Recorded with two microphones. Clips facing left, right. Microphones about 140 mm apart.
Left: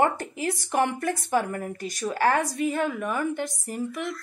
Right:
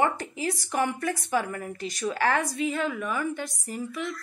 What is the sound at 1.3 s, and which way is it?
Speech, 45° left (ahead or behind).